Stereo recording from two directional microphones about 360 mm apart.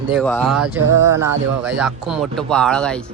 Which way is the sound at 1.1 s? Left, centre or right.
Centre.